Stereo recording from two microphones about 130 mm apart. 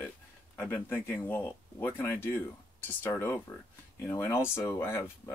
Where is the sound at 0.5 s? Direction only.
15° left (ahead or behind).